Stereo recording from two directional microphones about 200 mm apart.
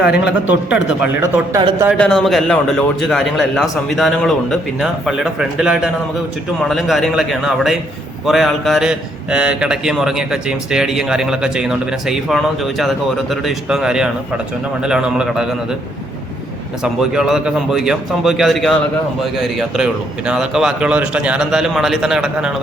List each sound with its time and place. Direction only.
0.0 s a man's voice: 5° right (ahead or behind)
2.0 s a man's voice: centre (ahead or behind)
16.8 s a man's voice: centre (ahead or behind)